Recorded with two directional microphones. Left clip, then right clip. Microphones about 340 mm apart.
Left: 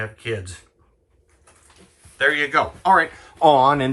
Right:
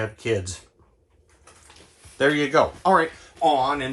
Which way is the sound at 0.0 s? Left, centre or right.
Centre.